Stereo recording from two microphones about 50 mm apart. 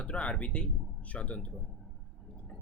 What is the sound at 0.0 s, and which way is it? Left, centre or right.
Speech, left.